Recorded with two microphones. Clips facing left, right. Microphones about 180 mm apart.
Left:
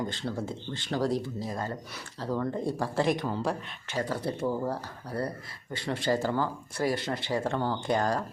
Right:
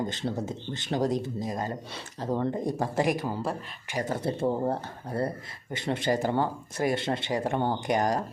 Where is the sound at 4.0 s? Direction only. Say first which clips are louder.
Right 2 dB; 20° right (ahead or behind).